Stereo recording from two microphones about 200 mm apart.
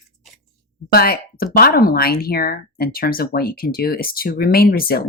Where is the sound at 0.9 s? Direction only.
50° left (ahead or behind).